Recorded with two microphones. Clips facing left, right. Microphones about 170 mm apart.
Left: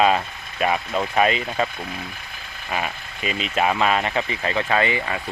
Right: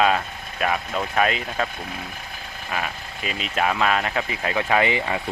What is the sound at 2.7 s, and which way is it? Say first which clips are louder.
Speech: left 2 dB; centre (ahead or behind).